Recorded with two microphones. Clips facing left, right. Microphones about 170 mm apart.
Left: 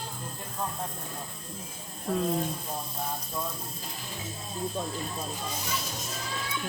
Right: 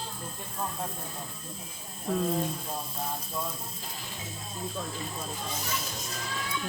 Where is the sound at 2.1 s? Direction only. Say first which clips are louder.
Even; centre (ahead or behind).